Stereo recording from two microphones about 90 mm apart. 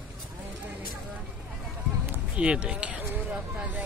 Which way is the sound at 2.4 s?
10° right (ahead or behind).